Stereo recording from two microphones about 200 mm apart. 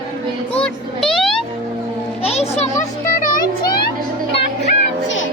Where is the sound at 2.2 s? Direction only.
30° left (ahead or behind).